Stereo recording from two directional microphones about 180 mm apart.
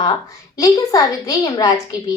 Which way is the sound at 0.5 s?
20° left (ahead or behind).